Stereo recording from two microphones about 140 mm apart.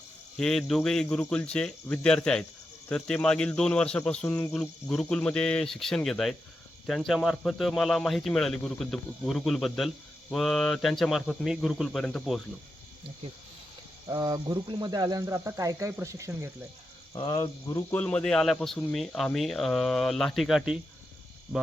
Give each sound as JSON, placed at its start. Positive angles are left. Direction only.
{"t": 0.3, "sound": "speech", "side_deg": 5}
{"t": 14.1, "sound": "speech", "side_deg": -30}
{"t": 17.2, "sound": "speech", "side_deg": 35}
{"t": 17.7, "sound": "speech", "side_deg": 10}